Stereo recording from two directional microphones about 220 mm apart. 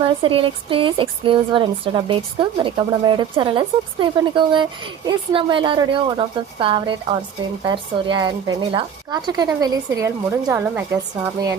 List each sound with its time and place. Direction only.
0.0 s speech: 25° right (ahead or behind)